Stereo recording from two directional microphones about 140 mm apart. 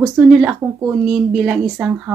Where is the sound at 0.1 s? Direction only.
5° right (ahead or behind).